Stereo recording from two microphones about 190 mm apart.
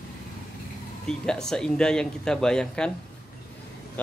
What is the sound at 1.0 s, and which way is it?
Speech, 5° left (ahead or behind).